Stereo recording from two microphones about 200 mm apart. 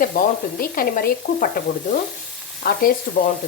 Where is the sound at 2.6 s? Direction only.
45° left (ahead or behind).